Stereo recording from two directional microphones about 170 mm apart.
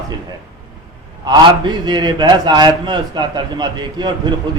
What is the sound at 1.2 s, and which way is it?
A man's voice, 25° right (ahead or behind).